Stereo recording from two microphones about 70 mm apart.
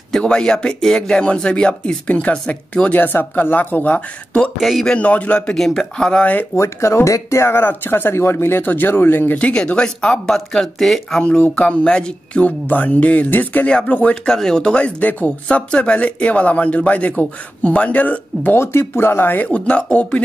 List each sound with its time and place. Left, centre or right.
0.2 s speech: centre
2.9 s speech: left
4.6 s speech: centre
4.8 s speech: centre
5.6 s speech: centre
6.5 s speech: left; by 11.2 s centre
11.2 s speech: centre
14.2 s speech: centre
18.6 s speech: left; by 20.2 s centre